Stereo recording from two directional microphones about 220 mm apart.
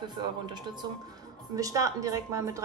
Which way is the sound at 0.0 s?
20° right (ahead or behind).